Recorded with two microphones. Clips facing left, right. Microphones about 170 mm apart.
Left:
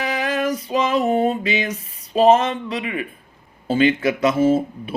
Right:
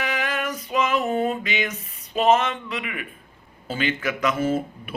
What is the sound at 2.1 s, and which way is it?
A man's voice, 35° left (ahead or behind).